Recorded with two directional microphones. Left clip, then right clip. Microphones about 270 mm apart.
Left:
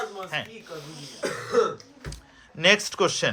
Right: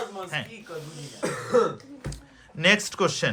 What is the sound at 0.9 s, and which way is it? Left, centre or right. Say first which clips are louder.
Cough: left 1 dB; centre.